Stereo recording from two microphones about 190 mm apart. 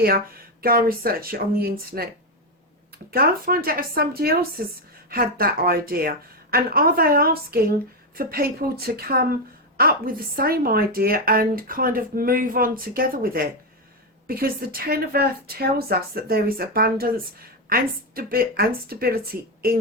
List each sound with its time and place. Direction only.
0.6 s a woman's voice: 50° right (ahead or behind)